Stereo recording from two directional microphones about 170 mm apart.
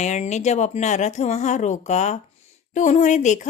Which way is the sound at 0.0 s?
40° left (ahead or behind).